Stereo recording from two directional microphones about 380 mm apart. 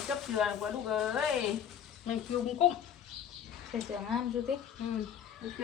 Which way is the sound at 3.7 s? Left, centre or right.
Centre.